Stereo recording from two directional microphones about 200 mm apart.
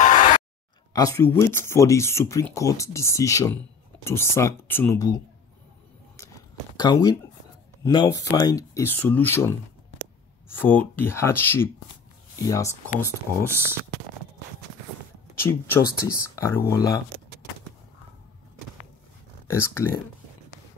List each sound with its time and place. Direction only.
0.0 s a sound: 40° left (ahead or behind)
0.9 s speech: 15° left (ahead or behind)
6.8 s speech: 20° left (ahead or behind)
15.3 s speech: 10° left (ahead or behind)
19.4 s speech: 15° left (ahead or behind)